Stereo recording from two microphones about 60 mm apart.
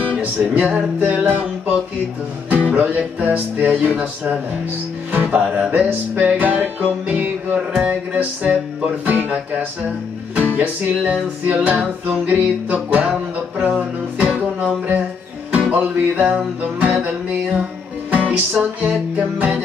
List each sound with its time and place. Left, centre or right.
0.1 s music: right
5.1 s music: right
10.6 s music: right